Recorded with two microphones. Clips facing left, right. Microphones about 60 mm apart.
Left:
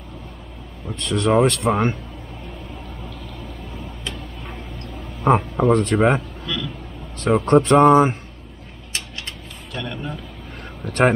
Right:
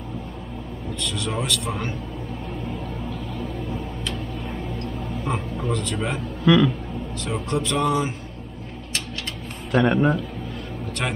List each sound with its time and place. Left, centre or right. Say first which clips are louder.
1.0 s a man's voice: left 11 dB; left
5.2 s speech: left 12 dB; left
6.4 s speech: right 12 dB; right
7.2 s speech: left 11 dB; left
9.7 s speech: right 12 dB; right
11.0 s speech: left 12 dB; left